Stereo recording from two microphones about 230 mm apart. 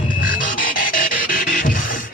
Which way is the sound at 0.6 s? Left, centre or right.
Left.